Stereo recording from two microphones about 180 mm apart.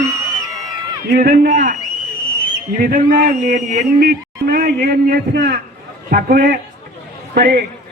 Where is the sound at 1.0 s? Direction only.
55° right (ahead or behind).